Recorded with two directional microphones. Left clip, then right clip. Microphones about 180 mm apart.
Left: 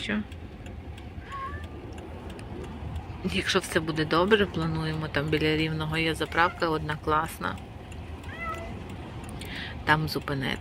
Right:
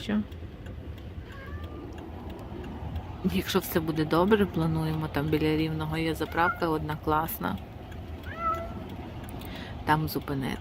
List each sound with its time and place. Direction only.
3.2 s speech: 20° right (ahead or behind)
9.5 s speech: 15° right (ahead or behind)